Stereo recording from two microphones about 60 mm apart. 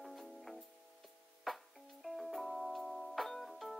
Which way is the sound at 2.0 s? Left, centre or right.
Centre.